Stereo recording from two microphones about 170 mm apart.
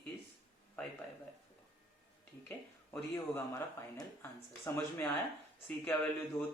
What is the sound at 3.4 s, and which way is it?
Speech, 15° left (ahead or behind).